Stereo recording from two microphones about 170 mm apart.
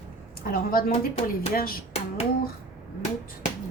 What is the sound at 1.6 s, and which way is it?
Speech, 60° left (ahead or behind).